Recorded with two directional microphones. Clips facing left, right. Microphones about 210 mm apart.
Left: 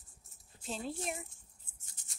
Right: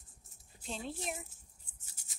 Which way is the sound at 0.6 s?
Centre (ahead or behind).